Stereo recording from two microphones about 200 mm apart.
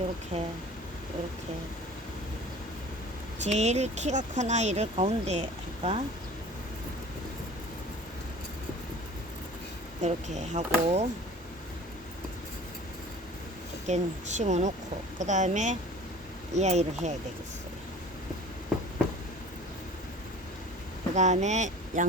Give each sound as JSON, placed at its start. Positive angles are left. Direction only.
{"t": 0.3, "sound": "speech", "side_deg": -35}
{"t": 3.4, "sound": "speech", "side_deg": -35}
{"t": 10.0, "sound": "speech", "side_deg": -35}
{"t": 13.8, "sound": "speech", "side_deg": -35}
{"t": 21.2, "sound": "speech", "side_deg": -35}